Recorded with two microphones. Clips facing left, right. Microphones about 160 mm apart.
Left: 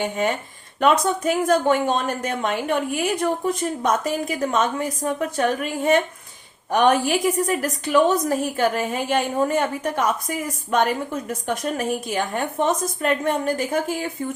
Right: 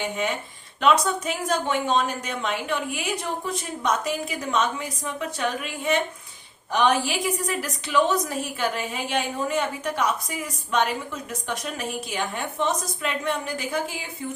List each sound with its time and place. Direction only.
0.0 s a woman's voice: 45° left (ahead or behind)